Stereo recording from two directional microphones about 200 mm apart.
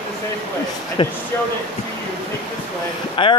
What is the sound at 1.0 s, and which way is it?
Speech, 25° left (ahead or behind).